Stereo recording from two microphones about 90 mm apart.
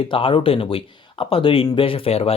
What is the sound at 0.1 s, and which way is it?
Speech, 75° left (ahead or behind).